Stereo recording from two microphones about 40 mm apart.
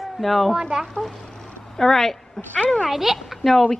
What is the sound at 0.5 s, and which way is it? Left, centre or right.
Speech, centre.